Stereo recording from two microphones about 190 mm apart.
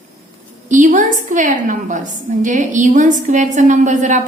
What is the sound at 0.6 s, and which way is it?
A woman's voice, 40° right (ahead or behind).